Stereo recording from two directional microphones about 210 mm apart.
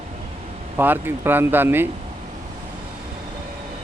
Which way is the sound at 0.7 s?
10° right (ahead or behind).